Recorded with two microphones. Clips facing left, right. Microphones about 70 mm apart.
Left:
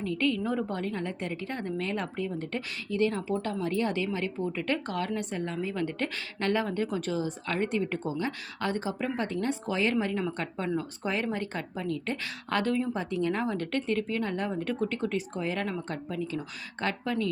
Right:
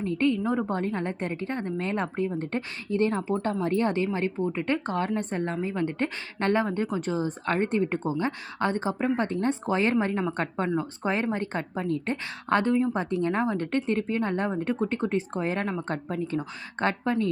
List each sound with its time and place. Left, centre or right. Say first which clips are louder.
0.0 s a woman's voice: right 3 dB; right
5.7 s speech: right 3 dB; right
7.2 s a woman's voice: right 4 dB; right
12.9 s a woman's voice: right 3 dB; right